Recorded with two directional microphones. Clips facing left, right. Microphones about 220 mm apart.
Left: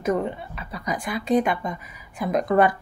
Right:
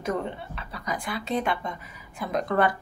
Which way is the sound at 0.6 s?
15° left (ahead or behind).